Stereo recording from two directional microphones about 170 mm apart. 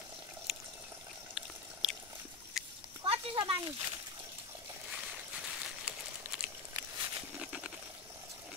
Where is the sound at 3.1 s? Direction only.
30° right (ahead or behind).